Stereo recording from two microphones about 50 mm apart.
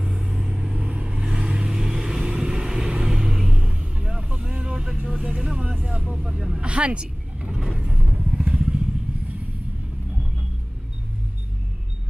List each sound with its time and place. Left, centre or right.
0.0 s vehicle: centre; by 8.3 s right
8.4 s motorcycle: right